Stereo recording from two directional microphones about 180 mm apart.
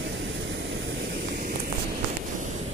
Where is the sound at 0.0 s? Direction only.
90° right.